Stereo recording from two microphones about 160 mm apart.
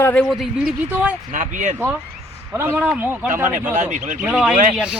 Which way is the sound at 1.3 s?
50° right (ahead or behind).